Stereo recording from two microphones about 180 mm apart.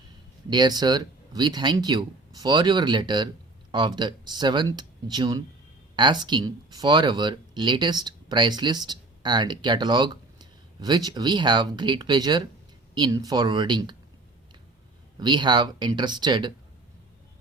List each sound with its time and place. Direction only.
0.5 s speech: 25° right (ahead or behind)
15.2 s speech: 25° right (ahead or behind)